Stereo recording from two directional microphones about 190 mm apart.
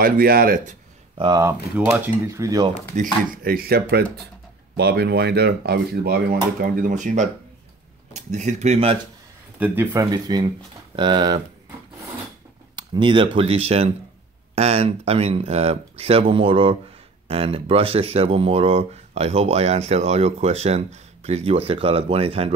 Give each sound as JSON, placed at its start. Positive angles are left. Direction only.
{"t": 0.0, "sound": "speech", "side_deg": -50}
{"t": 1.1, "sound": "speech", "side_deg": -25}
{"t": 3.0, "sound": "speech", "side_deg": -50}
{"t": 9.6, "sound": "speech", "side_deg": -10}
{"t": 10.0, "sound": "speech", "side_deg": -20}
{"t": 12.7, "sound": "speech", "side_deg": -25}